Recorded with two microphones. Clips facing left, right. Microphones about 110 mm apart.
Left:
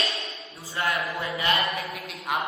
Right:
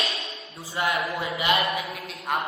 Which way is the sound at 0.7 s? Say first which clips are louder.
Right 2 dB; 25° right (ahead or behind).